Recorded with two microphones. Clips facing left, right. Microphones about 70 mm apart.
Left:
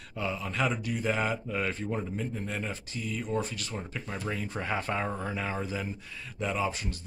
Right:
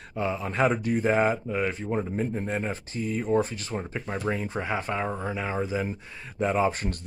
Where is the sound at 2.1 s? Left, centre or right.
Right.